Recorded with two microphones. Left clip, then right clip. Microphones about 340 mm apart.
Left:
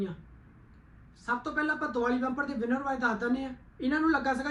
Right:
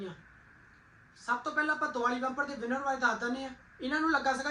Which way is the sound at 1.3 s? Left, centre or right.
Centre.